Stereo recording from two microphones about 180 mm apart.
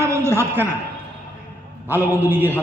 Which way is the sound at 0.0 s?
15° right (ahead or behind).